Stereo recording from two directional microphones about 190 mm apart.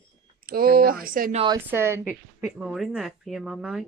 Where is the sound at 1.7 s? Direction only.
15° right (ahead or behind).